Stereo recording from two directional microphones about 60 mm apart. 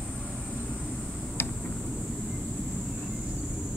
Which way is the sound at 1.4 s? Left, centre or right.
Left.